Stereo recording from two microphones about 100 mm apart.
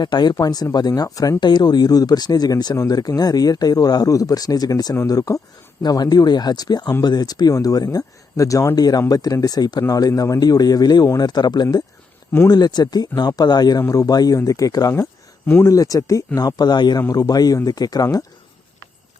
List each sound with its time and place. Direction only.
0.0 s speech: 45° left (ahead or behind)
15.4 s speech: 20° left (ahead or behind)
15.7 s speech: 35° left (ahead or behind)